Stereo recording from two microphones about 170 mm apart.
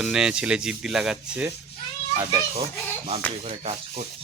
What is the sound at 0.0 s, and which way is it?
Speech, 5° right (ahead or behind).